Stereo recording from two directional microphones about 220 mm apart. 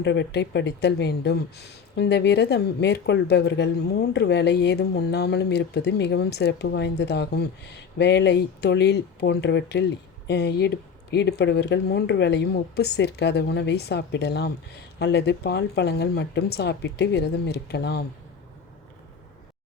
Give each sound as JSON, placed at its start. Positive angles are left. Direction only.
{"t": 0.0, "sound": "speech", "side_deg": 50}